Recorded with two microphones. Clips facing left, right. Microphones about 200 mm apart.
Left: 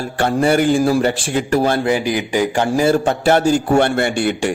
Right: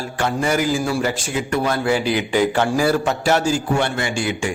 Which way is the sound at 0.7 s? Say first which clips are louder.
Left 6 dB; 35° left (ahead or behind).